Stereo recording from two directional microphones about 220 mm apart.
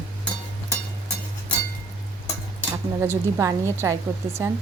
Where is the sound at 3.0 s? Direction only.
10° right (ahead or behind).